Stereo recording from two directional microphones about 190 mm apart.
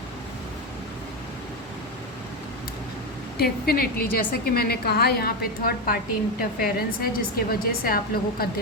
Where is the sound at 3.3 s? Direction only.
55° left (ahead or behind).